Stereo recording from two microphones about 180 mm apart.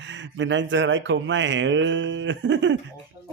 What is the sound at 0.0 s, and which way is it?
Speech, 90° right.